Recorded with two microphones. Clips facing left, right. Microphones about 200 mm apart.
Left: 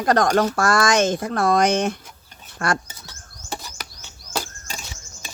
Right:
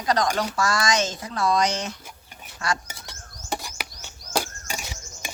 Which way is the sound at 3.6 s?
15° right (ahead or behind).